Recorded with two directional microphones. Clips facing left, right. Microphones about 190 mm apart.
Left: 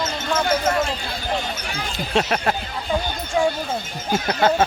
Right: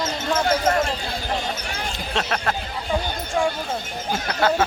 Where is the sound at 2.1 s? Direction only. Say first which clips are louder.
Left 4 dB; 10° left (ahead or behind).